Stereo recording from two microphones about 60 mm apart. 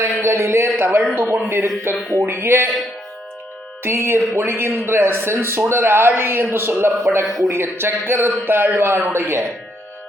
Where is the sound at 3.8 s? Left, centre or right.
Right.